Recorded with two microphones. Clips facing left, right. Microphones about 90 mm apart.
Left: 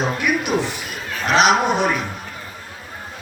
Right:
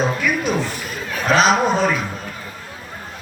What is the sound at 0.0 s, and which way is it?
A man's voice, 20° left (ahead or behind).